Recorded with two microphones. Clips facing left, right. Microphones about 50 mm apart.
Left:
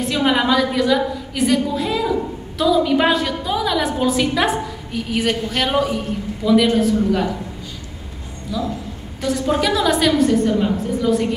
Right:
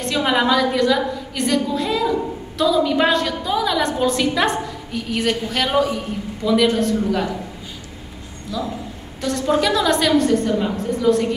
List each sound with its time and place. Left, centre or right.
0.0 s a woman's voice: centre
8.5 s a woman's voice: centre